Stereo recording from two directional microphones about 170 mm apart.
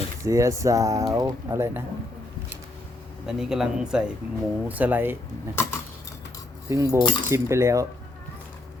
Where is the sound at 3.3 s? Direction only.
5° right (ahead or behind).